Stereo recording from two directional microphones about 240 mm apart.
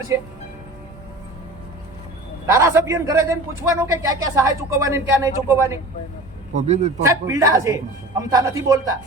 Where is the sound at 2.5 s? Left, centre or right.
Centre.